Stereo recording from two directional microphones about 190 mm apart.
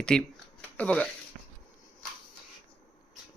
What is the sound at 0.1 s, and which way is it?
Speech, 5° left (ahead or behind).